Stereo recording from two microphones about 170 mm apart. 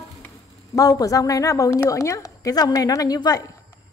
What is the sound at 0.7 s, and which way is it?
A woman's voice, 20° left (ahead or behind).